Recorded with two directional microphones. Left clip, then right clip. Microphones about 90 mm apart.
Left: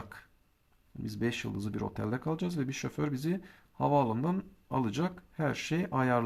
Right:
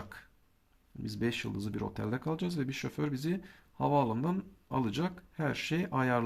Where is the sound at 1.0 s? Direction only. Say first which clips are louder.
Even; 35° left (ahead or behind).